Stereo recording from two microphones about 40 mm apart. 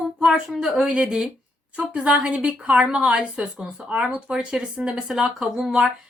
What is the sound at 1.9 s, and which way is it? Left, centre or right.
A woman's voice, right.